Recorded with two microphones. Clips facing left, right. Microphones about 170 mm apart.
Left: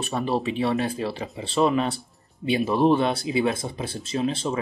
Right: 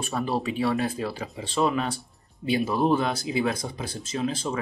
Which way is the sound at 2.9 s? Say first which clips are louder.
Left 3 dB; 30° left (ahead or behind).